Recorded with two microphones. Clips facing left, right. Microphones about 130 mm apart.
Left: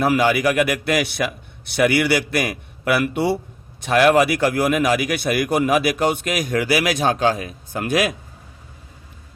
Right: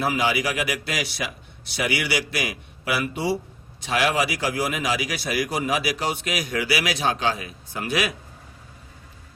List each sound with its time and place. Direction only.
0.0 s a man's voice: 55° left (ahead or behind)